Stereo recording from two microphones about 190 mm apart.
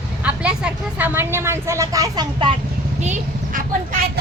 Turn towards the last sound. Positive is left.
turn(degrees=-40)  # may be behind; listen again after turning